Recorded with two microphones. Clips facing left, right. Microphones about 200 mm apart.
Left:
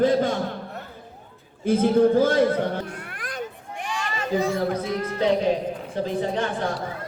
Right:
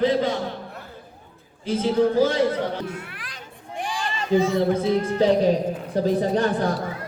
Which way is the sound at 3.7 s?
30° right (ahead or behind).